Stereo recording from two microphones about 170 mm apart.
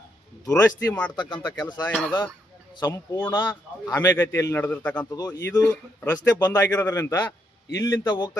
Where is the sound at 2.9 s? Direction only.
15° left (ahead or behind).